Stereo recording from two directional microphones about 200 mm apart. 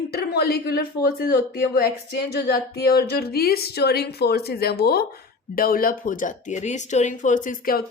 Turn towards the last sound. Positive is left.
turn(degrees=45)  # may be behind; listen again after turning